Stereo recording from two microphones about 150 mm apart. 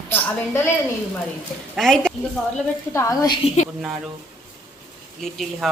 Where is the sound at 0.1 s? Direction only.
15° left (ahead or behind).